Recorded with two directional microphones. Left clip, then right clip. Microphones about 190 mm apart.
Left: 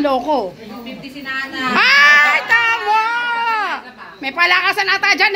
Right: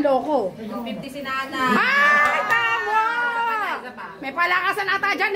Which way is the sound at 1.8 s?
25° left (ahead or behind).